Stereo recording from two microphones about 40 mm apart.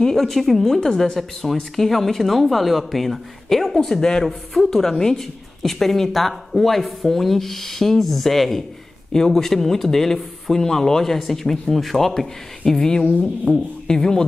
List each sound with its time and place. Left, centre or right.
0.2 s a woman's voice: centre
0.7 s a woman's voice: centre
12.2 s speech: centre
13.5 s speech: left
13.8 s speech: centre